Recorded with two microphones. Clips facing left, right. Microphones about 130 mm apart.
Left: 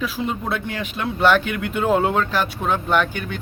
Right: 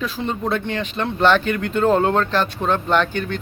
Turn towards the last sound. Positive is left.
turn(degrees=10)  # may be behind; listen again after turning